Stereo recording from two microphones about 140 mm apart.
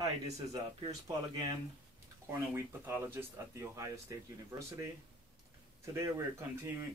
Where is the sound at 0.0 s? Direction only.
30° right (ahead or behind).